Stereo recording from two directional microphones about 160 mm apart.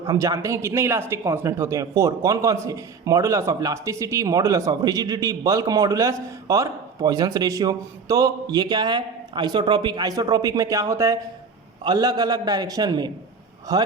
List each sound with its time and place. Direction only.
0.0 s speech: 20° right (ahead or behind)